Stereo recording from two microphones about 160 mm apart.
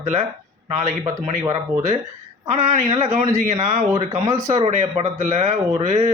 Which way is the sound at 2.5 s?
45° right (ahead or behind).